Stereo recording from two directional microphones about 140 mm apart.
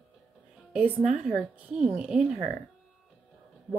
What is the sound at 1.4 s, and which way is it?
Speech, 5° right (ahead or behind).